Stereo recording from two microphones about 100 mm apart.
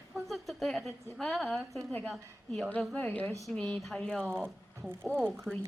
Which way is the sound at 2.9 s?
15° left (ahead or behind).